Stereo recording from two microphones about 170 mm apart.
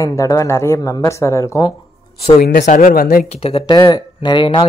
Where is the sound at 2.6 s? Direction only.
50° left (ahead or behind).